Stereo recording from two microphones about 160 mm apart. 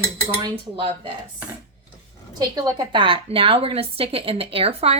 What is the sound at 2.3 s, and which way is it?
A woman's voice, 25° right (ahead or behind).